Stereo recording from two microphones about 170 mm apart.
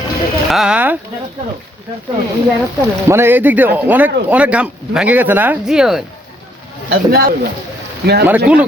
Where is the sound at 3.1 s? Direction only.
15° right (ahead or behind).